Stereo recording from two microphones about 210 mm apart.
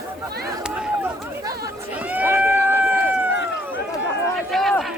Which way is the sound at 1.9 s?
5° right (ahead or behind).